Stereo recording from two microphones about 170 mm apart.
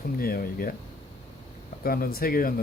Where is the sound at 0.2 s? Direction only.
60° left (ahead or behind).